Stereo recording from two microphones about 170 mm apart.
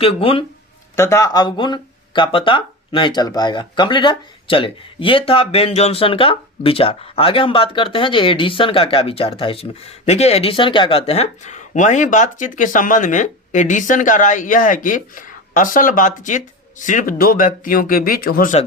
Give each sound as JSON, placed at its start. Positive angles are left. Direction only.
{"t": 0.0, "sound": "speech", "side_deg": 35}
{"t": 0.9, "sound": "speech", "side_deg": 20}